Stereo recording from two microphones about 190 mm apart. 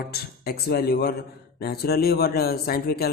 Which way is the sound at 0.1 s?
55° left (ahead or behind).